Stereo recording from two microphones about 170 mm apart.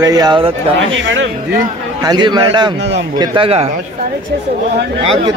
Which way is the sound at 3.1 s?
25° right (ahead or behind).